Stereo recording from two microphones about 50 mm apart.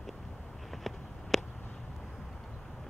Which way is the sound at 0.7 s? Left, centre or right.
Centre.